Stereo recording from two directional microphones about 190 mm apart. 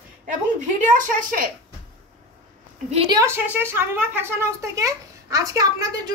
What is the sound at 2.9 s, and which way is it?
Speech, 30° right (ahead or behind).